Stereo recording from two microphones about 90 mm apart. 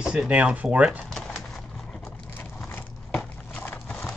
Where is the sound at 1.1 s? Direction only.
5° left (ahead or behind).